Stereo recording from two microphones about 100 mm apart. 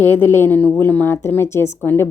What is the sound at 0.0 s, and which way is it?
A woman's voice, 20° left (ahead or behind).